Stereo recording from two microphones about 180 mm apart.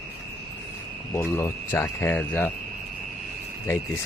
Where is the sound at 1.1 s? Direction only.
15° left (ahead or behind).